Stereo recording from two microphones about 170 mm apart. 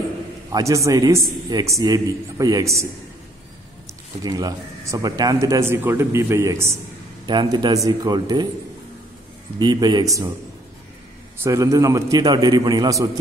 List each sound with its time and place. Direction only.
0.5 s a man's voice: 20° right (ahead or behind)
4.2 s speech: 20° right (ahead or behind)
7.2 s a man's voice: 25° right (ahead or behind)
9.6 s a man's voice: 25° right (ahead or behind)
11.3 s a man's voice: 15° right (ahead or behind)